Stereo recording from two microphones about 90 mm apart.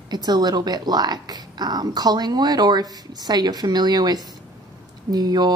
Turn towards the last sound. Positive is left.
turn(degrees=-50)  # may be behind; listen again after turning